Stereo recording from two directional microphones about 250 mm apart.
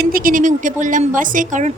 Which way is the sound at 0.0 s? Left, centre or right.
Right.